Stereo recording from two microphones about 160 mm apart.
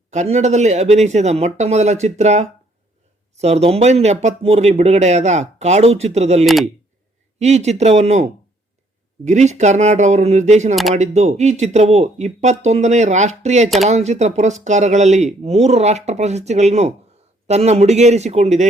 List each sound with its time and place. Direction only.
0.1 s speech: 45° right (ahead or behind)
6.4 s speech: centre (ahead or behind)
7.3 s speech: 45° right (ahead or behind)